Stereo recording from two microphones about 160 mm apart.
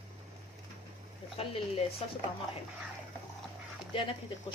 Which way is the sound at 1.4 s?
35° left (ahead or behind).